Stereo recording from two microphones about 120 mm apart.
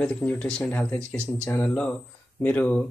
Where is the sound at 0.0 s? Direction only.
10° left (ahead or behind).